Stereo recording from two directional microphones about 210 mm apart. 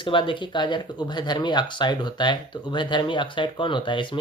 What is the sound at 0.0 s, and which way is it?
Speech, 25° left (ahead or behind).